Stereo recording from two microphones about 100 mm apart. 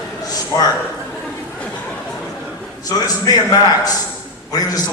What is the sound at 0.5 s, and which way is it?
Speech, 40° left (ahead or behind).